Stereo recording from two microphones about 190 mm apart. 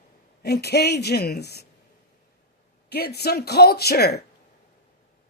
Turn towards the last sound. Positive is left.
turn(degrees=60)  # may be behind; listen again after turning